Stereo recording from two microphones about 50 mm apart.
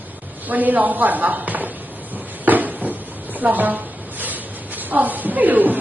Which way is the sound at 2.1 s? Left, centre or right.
Right.